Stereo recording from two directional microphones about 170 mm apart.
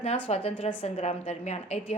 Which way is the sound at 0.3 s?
35° left (ahead or behind).